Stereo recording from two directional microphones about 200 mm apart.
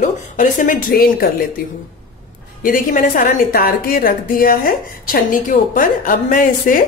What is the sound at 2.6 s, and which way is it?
A woman's voice, 45° left (ahead or behind).